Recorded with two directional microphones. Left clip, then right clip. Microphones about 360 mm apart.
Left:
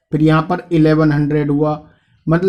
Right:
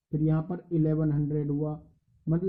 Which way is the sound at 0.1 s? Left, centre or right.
Centre.